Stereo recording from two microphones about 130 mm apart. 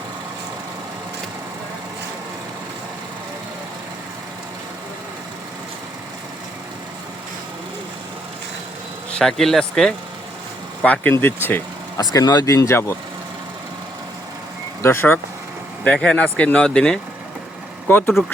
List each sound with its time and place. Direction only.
9.1 s speech: centre (ahead or behind)
12.1 s speech: 30° left (ahead or behind)
14.8 s speech: 20° left (ahead or behind)
15.8 s speech: 5° left (ahead or behind)